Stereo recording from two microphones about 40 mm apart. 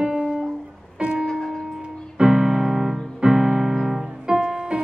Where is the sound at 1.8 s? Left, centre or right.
Right.